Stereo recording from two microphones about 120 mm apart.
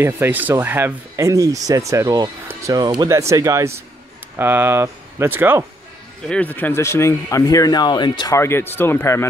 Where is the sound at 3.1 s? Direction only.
25° right (ahead or behind).